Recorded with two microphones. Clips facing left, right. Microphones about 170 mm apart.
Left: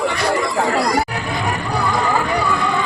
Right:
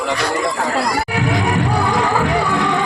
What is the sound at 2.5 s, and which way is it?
Music, 85° right.